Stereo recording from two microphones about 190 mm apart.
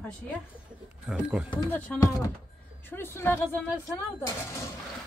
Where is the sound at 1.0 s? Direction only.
5° right (ahead or behind).